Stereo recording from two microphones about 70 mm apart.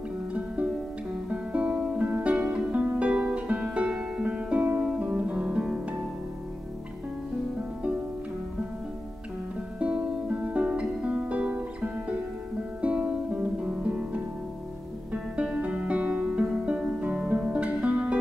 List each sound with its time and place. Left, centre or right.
1.3 s music: centre
4.7 s guitar: centre
9.8 s music: centre